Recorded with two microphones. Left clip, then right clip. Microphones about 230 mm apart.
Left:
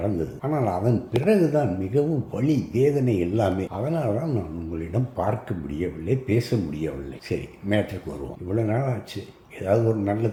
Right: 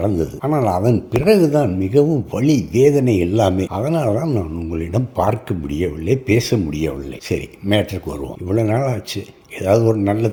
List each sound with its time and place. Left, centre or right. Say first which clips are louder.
0.0 s speech: right 7 dB; right